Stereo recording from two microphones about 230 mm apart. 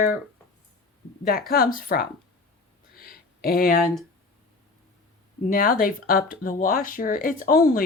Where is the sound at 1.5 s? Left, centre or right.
Left.